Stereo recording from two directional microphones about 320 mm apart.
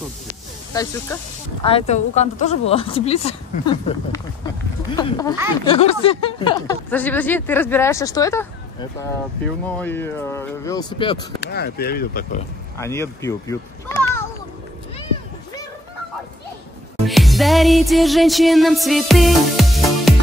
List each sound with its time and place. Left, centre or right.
0.7 s speech: centre
9.7 s speech: centre
11.4 s speech: left
12.7 s speech: centre
17.0 s music: centre